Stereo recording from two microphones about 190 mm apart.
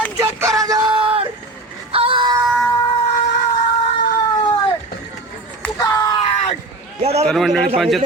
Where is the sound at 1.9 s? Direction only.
30° right (ahead or behind).